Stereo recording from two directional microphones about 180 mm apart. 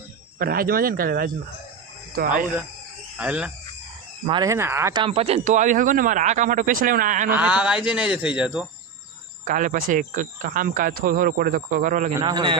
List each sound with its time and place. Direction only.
0.3 s speech: 55° right (ahead or behind)
3.2 s speech: 5° right (ahead or behind)
4.3 s speech: 20° right (ahead or behind)
5.0 s speech: 35° right (ahead or behind); by 7.3 s 50° right (ahead or behind)
7.3 s speech: 10° right (ahead or behind)
9.4 s speech: 45° right (ahead or behind)
12.2 s a man's voice: 25° right (ahead or behind)